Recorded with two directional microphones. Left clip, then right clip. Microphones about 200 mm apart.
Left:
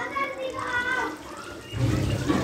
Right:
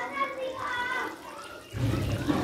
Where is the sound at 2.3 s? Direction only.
20° left (ahead or behind).